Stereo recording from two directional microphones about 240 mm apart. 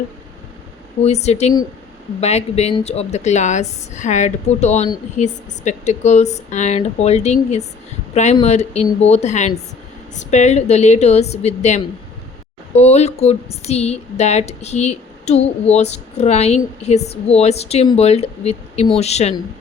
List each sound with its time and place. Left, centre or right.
1.0 s speech: left